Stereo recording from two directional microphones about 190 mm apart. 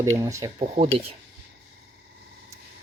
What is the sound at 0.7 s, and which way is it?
Speech, 30° right (ahead or behind).